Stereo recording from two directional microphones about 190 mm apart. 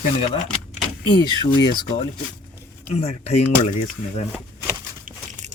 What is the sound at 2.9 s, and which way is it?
Speech, 35° left (ahead or behind).